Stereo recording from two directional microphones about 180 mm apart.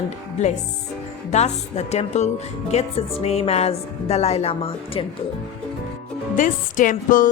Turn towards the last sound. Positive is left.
turn(degrees=50)  # may be behind; listen again after turning